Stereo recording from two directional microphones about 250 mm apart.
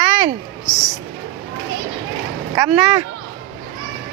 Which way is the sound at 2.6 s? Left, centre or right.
Centre.